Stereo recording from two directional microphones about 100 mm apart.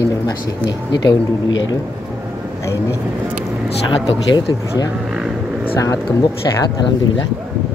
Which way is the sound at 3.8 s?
45° left (ahead or behind).